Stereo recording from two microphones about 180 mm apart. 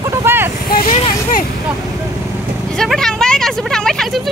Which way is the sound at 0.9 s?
30° left (ahead or behind).